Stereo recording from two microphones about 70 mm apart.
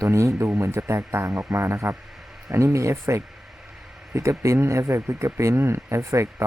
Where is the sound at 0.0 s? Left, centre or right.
Right.